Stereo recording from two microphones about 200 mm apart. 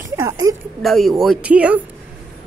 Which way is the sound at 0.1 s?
15° right (ahead or behind).